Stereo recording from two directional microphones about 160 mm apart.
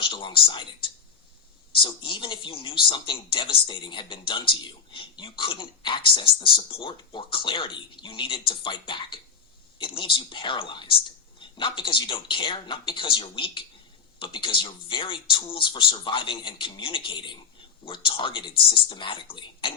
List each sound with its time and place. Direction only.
0.0 s speech: 30° left (ahead or behind)